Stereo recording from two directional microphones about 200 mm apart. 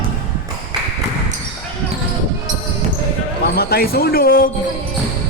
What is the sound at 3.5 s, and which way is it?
Speech, 50° left (ahead or behind).